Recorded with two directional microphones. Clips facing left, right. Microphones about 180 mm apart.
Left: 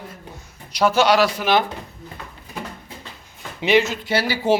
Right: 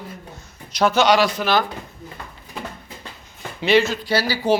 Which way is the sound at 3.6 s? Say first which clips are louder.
Right 1 dB; 15° left (ahead or behind).